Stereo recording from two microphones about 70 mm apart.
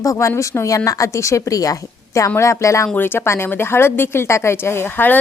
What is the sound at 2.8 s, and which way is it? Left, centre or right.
A woman's voice, left.